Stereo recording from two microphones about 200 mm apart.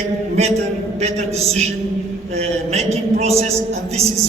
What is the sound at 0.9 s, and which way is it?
A man's voice, 35° right (ahead or behind).